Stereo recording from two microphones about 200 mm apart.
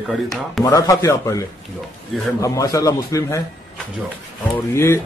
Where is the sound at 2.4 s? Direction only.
15° left (ahead or behind).